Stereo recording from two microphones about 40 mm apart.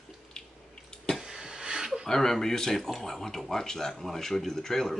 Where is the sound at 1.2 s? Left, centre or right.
Centre.